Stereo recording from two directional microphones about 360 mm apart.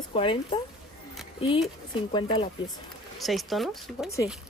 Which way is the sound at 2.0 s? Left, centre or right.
Centre.